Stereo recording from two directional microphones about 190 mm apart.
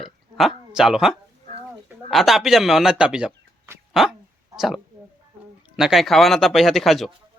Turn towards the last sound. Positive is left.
turn(degrees=0)  # may be behind; listen again after turning